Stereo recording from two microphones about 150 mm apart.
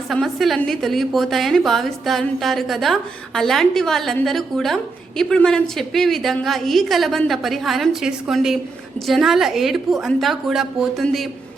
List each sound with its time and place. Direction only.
0.1 s a woman's voice: centre (ahead or behind)